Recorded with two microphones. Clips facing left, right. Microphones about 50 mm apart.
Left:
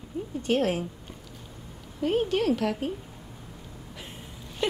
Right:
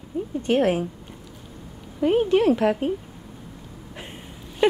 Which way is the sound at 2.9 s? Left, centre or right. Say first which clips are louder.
Right 8 dB; centre.